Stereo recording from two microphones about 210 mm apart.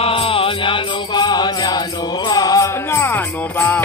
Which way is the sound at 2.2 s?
20° left (ahead or behind).